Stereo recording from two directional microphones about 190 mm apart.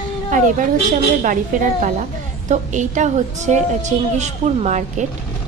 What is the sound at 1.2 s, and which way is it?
A woman's voice, 45° right (ahead or behind).